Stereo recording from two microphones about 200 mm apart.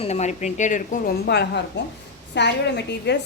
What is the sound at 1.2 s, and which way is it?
A woman's voice, 55° left (ahead or behind).